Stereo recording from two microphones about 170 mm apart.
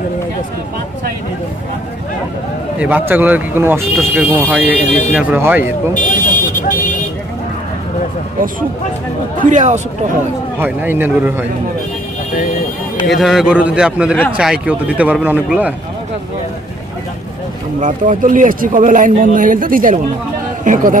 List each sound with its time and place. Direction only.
2.8 s speech: 10° right (ahead or behind)
5.9 s car alarm: 50° left (ahead or behind)
9.4 s speech: 45° right (ahead or behind)
10.6 s speech: 10° right (ahead or behind)
13.2 s a man's voice: centre (ahead or behind)
17.7 s speech: 50° right (ahead or behind)